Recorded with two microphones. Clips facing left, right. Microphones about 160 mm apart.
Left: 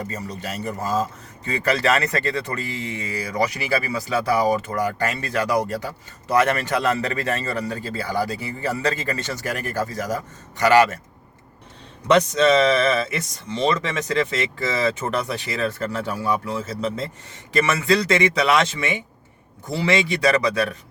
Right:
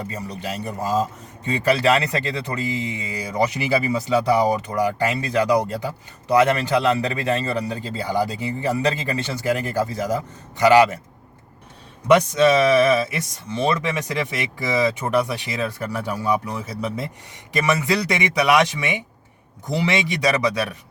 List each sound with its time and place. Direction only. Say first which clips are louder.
0.1 s speech: right 1 dB; 15° right (ahead or behind)
12.0 s speech: right 1 dB; 10° right (ahead or behind)